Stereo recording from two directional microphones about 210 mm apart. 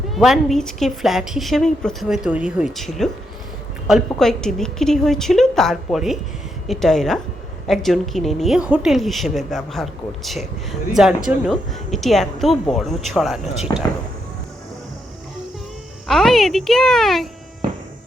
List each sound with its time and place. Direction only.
0.1 s a woman's voice: centre (ahead or behind)
16.0 s a woman's voice: centre (ahead or behind)